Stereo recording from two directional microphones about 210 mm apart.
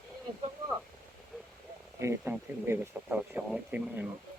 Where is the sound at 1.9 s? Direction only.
10° right (ahead or behind).